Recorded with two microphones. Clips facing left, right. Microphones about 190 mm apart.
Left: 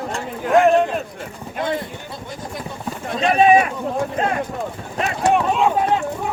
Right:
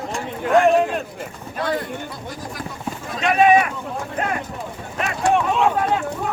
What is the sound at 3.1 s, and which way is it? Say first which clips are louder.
Speech: left 1 dB; 30° left (ahead or behind).